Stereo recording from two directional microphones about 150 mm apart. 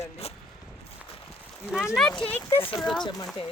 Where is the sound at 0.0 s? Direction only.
40° left (ahead or behind).